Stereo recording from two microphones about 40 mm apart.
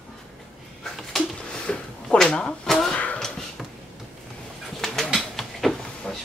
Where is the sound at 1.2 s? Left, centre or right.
Left.